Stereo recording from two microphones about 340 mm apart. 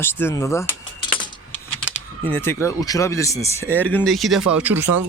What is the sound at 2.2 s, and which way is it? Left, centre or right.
Speech, centre.